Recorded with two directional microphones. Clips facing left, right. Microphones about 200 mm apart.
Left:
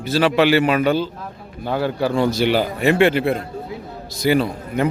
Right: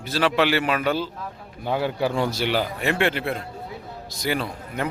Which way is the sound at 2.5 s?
5° left (ahead or behind).